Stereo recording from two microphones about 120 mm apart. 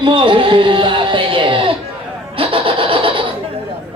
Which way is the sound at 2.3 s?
50° right (ahead or behind).